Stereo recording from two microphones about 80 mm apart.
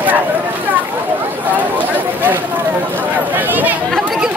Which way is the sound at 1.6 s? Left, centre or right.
Right.